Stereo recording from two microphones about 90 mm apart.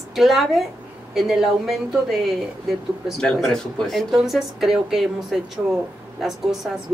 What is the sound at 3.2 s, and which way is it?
Speech, 5° left (ahead or behind).